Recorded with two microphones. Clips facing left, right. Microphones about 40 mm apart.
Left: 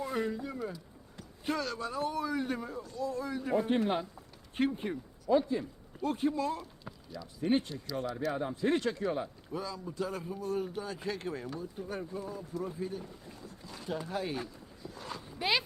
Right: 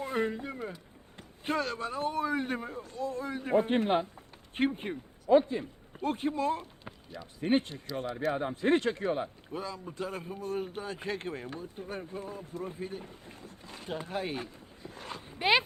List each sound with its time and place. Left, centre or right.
0.0 s speech: right